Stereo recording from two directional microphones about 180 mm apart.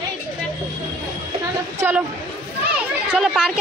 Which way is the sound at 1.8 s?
10° right (ahead or behind).